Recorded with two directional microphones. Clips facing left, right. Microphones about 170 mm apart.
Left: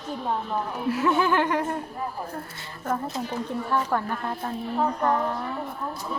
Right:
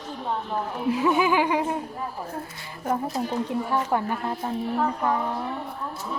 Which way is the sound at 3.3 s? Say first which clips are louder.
Even; 15° right (ahead or behind).